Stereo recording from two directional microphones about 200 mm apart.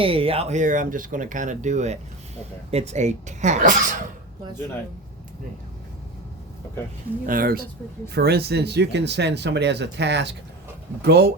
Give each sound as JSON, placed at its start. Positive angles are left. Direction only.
{"t": 0.0, "sound": "speech", "side_deg": -25}
{"t": 7.3, "sound": "speech", "side_deg": -45}